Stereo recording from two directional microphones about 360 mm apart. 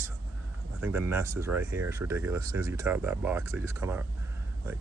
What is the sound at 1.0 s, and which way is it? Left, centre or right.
Speech, centre.